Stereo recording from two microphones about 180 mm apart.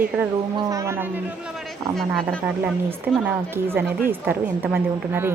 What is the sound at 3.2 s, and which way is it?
A woman's voice, 10° right (ahead or behind).